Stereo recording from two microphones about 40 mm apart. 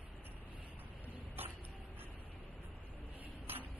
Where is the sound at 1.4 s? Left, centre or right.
Right.